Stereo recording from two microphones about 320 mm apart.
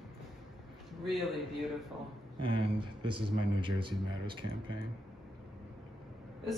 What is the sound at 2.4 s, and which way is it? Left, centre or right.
Speech, centre.